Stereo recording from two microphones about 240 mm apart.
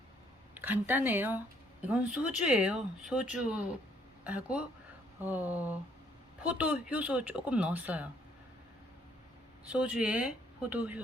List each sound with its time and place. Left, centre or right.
0.5 s speech: centre
9.6 s speech: centre